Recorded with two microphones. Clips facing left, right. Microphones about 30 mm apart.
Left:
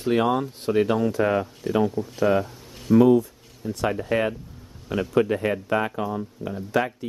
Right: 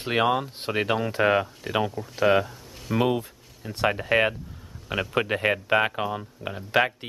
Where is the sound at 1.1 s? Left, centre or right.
Right.